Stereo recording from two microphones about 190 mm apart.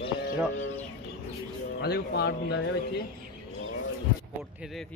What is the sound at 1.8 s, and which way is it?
Speech, 60° left (ahead or behind).